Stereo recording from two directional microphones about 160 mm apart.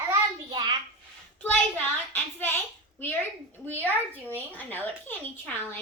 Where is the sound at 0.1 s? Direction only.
30° right (ahead or behind).